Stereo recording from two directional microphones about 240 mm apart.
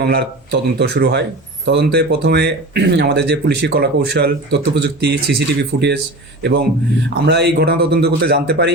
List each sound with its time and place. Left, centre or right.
0.0 s speech: right
7.3 s speech: right